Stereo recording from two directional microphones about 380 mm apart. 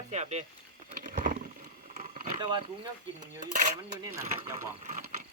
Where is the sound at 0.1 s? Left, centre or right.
Centre.